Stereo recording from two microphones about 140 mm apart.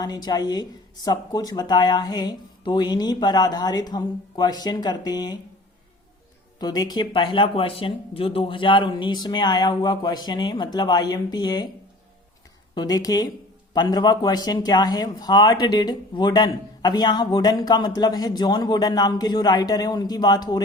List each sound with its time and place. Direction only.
0.0 s speech: 30° left (ahead or behind)
6.6 s speech: 30° left (ahead or behind)
12.7 s speech: 30° left (ahead or behind)